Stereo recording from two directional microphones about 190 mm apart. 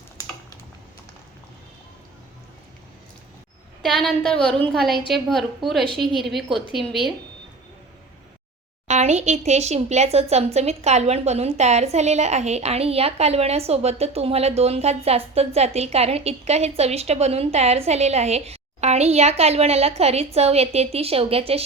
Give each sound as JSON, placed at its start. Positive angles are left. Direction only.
{"t": 3.8, "sound": "a woman's voice", "side_deg": 0}
{"t": 8.9, "sound": "speech", "side_deg": -35}